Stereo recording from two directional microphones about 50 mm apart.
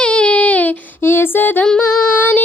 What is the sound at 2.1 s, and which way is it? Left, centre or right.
Female singing, left.